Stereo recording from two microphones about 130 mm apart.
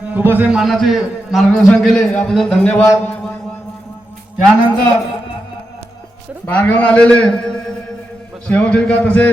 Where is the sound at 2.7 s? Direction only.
15° left (ahead or behind).